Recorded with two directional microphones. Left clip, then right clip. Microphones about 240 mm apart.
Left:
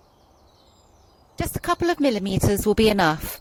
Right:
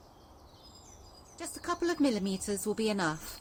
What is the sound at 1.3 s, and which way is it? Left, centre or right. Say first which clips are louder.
Speech: left 11 dB; left.